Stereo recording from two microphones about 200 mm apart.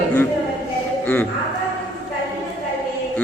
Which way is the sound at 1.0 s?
10° left (ahead or behind).